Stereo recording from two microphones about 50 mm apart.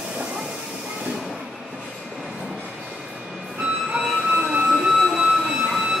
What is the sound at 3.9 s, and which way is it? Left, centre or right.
Train, centre.